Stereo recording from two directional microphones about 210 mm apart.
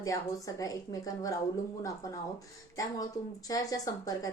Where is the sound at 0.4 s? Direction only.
15° left (ahead or behind).